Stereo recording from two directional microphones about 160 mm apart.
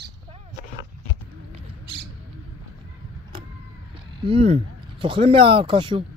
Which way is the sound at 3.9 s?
35° right (ahead or behind).